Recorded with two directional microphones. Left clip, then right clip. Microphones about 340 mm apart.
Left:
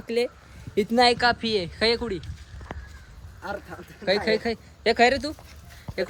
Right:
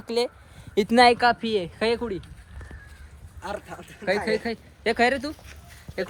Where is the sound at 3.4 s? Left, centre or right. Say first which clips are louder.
Even; centre.